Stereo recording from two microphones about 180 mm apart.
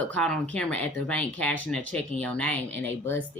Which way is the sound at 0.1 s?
5° left (ahead or behind).